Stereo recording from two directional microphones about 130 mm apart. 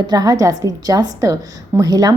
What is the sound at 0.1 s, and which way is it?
A woman's voice, 30° right (ahead or behind).